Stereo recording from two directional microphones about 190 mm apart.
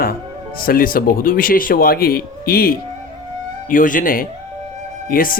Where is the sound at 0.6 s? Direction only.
50° left (ahead or behind).